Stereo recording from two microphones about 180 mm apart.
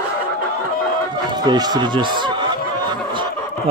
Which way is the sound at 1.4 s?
25° right (ahead or behind).